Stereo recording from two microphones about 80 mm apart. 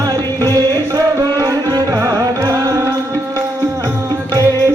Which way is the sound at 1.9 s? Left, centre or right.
Right.